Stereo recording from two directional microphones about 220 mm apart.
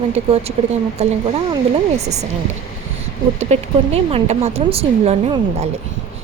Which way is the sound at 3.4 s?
30° right (ahead or behind).